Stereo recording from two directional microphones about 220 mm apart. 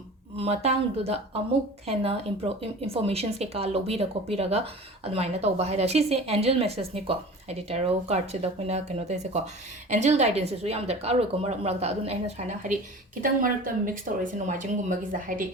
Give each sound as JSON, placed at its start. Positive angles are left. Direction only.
{"t": 0.3, "sound": "a woman's voice", "side_deg": -30}